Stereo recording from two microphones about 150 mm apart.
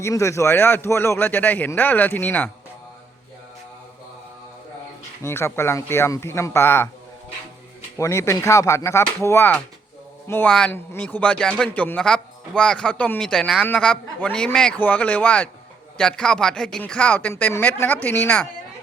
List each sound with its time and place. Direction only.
0.0 s a man's voice: 20° left (ahead or behind)
5.2 s a man's voice: 15° left (ahead or behind)
7.9 s a man's voice: 20° left (ahead or behind)